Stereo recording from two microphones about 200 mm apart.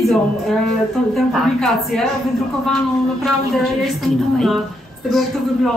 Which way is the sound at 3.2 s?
Centre (ahead or behind).